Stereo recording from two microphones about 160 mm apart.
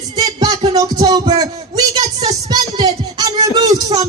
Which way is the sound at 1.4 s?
25° right (ahead or behind).